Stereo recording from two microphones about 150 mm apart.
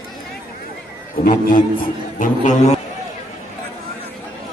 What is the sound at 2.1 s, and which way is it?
Speech, 55° left (ahead or behind).